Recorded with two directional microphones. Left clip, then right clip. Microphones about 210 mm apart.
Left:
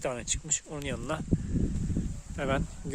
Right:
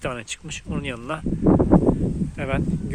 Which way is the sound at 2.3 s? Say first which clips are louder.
Right 1 dB; 15° left (ahead or behind).